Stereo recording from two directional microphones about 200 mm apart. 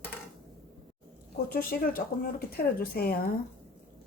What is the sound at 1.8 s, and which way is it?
A woman's voice, 50° left (ahead or behind).